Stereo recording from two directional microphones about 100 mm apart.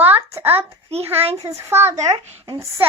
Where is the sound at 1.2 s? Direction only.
90° right.